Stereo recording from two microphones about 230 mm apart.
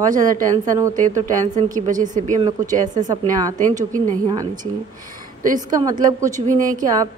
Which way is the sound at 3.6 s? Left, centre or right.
Right.